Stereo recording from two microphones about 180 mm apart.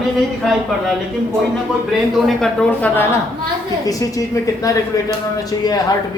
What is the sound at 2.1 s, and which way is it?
A woman's voice, centre (ahead or behind).